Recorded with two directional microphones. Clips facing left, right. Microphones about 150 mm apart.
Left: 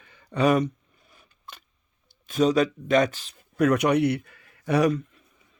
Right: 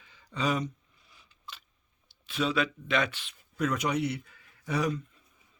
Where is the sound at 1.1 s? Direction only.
50° left (ahead or behind).